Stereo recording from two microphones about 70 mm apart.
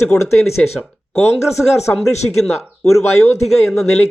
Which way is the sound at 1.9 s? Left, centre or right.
Left.